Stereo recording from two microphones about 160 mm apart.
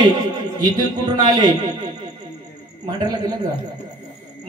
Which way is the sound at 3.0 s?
25° right (ahead or behind).